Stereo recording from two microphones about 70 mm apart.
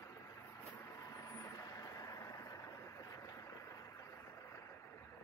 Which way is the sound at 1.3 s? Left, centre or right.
Left.